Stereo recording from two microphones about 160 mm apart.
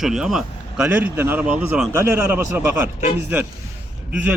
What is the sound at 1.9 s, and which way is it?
A man's voice, 20° right (ahead or behind).